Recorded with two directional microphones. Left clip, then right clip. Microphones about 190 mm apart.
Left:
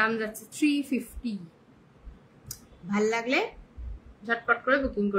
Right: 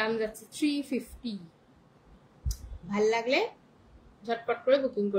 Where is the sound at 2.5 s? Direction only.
15° left (ahead or behind).